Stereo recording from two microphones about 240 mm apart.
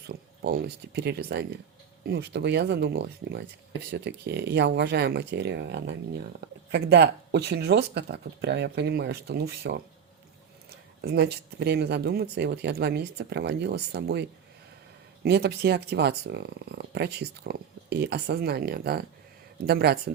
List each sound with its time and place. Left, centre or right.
0.4 s speech: right
11.0 s speech: right